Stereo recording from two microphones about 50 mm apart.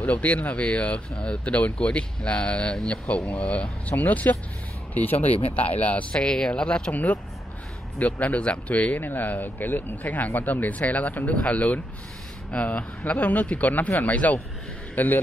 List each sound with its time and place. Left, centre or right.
0.0 s speech: left
6.1 s speech: centre
6.9 s speech: left